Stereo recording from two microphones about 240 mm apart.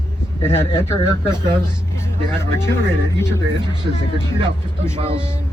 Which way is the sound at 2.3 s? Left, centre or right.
Centre.